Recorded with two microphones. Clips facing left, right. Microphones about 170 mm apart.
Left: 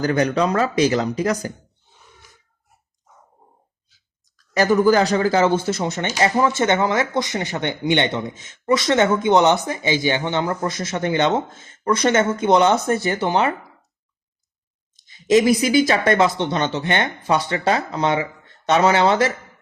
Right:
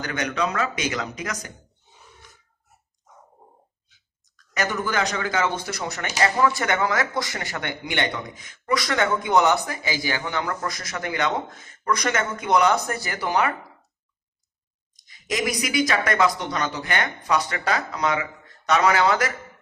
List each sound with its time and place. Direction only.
0.0 s speech: 35° left (ahead or behind)
3.8 s speech: 35° left (ahead or behind)
15.0 s speech: 25° left (ahead or behind)